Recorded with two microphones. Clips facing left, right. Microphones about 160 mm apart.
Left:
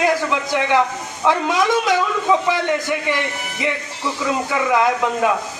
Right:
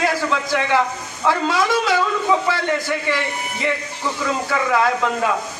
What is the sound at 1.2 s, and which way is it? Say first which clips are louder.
A man's voice: left 1 dB; 15° left (ahead or behind).